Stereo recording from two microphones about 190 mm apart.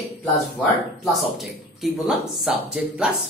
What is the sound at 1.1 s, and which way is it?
Speech, centre (ahead or behind).